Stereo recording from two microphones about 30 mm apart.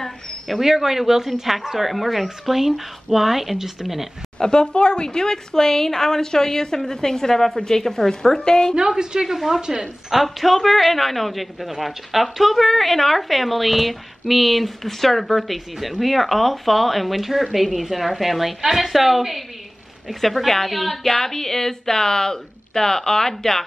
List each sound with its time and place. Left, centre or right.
0.6 s speech: centre
4.4 s a woman's voice: left
8.7 s a woman's voice: right
9.3 s speech: centre
9.6 s a woman's voice: right
10.2 s a woman's voice: centre